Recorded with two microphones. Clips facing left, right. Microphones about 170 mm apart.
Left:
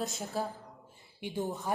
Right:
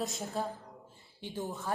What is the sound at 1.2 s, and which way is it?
Speech, 15° left (ahead or behind).